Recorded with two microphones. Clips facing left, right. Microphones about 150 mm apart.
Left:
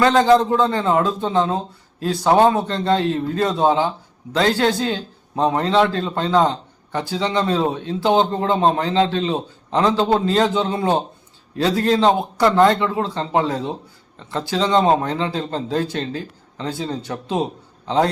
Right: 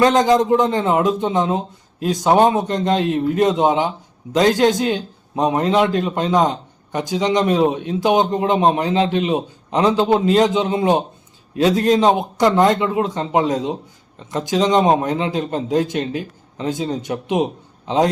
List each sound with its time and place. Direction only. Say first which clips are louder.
0.0 s speech: even; 15° right (ahead or behind)